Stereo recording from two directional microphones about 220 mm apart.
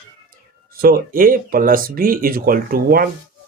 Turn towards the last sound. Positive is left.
turn(degrees=-40)  # may be behind; listen again after turning